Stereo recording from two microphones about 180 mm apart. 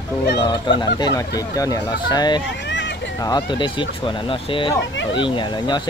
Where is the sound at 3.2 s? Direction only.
20° left (ahead or behind).